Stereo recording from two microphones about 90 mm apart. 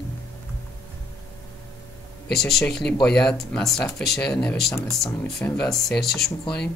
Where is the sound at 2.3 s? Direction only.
5° left (ahead or behind).